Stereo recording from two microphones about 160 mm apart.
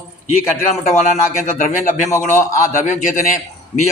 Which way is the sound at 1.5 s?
55° left (ahead or behind).